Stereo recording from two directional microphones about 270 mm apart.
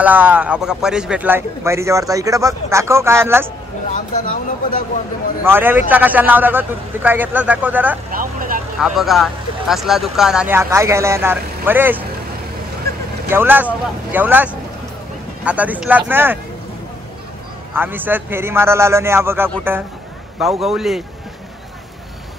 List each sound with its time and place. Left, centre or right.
0.0 s a man's voice: centre
3.9 s speech: left
5.4 s a man's voice: centre
8.1 s vehicle: right
8.7 s speech: centre
13.3 s a man's voice: centre
17.7 s a man's voice: centre
20.6 s speech: centre